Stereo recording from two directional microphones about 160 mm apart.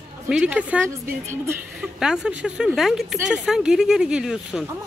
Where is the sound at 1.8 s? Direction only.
5° right (ahead or behind).